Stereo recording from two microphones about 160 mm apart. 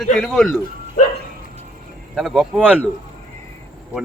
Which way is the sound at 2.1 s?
5° right (ahead or behind).